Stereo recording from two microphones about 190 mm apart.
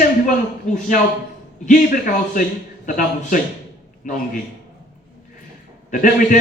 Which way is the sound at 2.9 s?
50° left (ahead or behind).